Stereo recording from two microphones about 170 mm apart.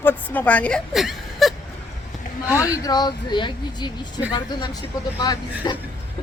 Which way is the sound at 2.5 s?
20° left (ahead or behind).